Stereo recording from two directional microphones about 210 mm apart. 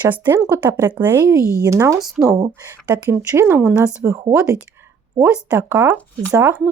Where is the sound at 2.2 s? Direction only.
15° right (ahead or behind).